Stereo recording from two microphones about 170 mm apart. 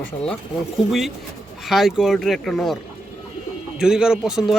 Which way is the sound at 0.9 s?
Centre (ahead or behind).